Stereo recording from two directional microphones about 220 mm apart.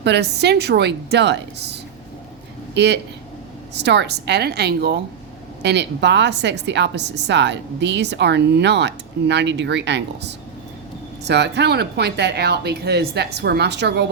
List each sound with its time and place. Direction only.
0.0 s a woman's voice: 50° right (ahead or behind)